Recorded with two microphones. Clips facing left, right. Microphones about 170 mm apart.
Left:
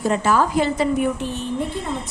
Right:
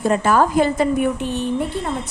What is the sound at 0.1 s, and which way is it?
Speech, 50° right (ahead or behind).